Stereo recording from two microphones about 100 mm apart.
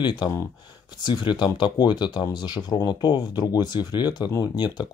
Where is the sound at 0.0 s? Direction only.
50° left (ahead or behind).